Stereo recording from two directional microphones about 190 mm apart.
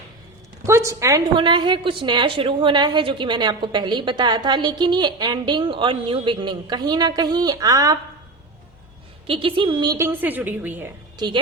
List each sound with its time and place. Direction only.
0.6 s a woman's voice: 15° right (ahead or behind)
9.2 s a woman's voice: 25° right (ahead or behind); by 10.9 s 10° right (ahead or behind)
11.2 s a woman's voice: 20° right (ahead or behind)